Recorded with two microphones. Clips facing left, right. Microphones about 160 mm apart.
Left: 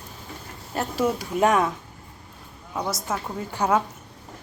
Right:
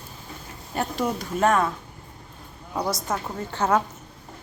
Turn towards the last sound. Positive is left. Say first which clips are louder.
# even
turn(degrees=10)  # may be behind; listen again after turning